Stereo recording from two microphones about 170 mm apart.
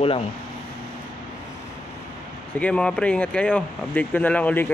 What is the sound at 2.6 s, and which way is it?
Speech, 5° left (ahead or behind).